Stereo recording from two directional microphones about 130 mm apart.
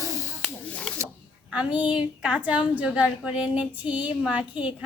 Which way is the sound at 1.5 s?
10° right (ahead or behind).